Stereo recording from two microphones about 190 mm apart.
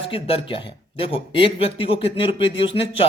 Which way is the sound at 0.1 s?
30° left (ahead or behind).